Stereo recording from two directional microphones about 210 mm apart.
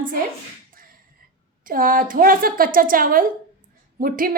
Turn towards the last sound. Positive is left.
turn(degrees=-40)  # may be behind; listen again after turning